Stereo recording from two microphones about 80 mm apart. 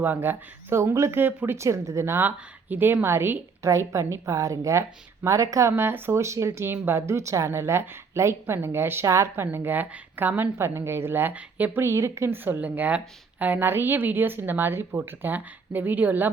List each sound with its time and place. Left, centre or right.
0.0 s speech: right
5.7 s speech: right
9.3 s speech: right
11.8 s speech: right